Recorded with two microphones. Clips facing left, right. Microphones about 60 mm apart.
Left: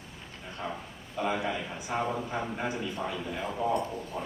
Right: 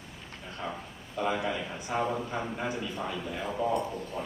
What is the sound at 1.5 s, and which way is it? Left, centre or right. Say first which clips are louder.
A man's voice: even; centre.